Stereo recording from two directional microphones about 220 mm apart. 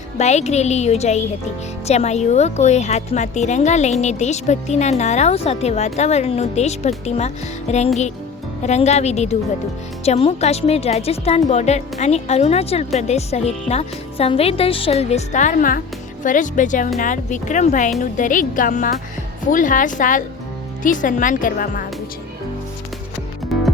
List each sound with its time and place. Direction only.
0.2 s a woman's voice: 30° left (ahead or behind)